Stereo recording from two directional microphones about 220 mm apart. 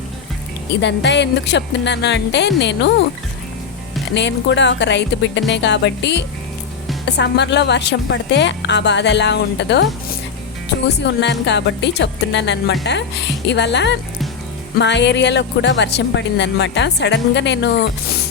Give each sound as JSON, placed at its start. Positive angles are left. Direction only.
{"t": 0.8, "sound": "a woman's voice", "side_deg": 50}
{"t": 4.1, "sound": "a woman's voice", "side_deg": 55}
{"t": 10.8, "sound": "a woman's voice", "side_deg": 50}